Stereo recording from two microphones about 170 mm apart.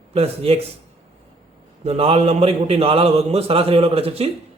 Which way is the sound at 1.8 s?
35° right (ahead or behind).